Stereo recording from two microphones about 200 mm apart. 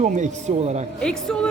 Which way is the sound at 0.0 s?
35° right (ahead or behind).